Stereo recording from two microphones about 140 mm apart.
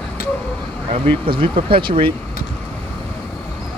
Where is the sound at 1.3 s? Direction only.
40° right (ahead or behind).